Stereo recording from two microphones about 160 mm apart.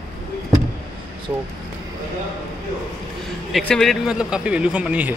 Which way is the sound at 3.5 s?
Centre (ahead or behind).